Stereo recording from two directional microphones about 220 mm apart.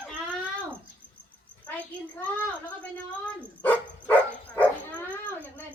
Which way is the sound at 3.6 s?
5° left (ahead or behind).